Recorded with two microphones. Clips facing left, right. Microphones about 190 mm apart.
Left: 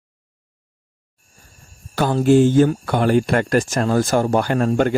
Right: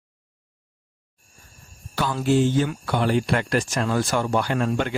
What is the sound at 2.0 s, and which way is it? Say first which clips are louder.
Speech: left 7 dB; 45° left (ahead or behind).